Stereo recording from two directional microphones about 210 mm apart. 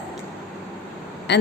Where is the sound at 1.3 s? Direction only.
55° left (ahead or behind).